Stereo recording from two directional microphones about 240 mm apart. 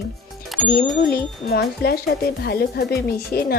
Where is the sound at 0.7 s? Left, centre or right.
Left.